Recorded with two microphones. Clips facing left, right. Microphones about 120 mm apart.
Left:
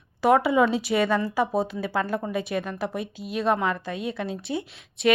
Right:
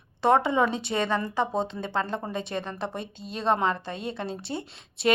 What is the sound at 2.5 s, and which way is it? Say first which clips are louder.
Speech: left 4 dB; 25° right (ahead or behind).